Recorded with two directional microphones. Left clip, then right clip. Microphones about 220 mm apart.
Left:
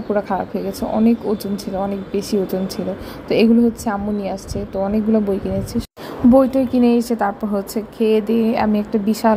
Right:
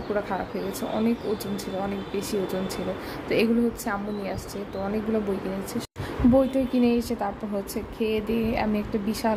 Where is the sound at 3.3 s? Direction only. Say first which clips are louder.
Left 8 dB; 20° left (ahead or behind).